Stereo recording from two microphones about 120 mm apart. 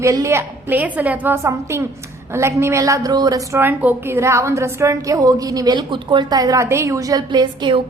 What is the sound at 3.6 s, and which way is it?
A woman's voice, 15° right (ahead or behind).